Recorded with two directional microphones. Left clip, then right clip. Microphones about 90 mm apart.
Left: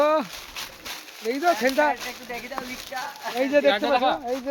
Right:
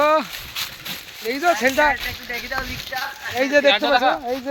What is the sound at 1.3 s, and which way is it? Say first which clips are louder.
Speech: right 3 dB; 60° right (ahead or behind).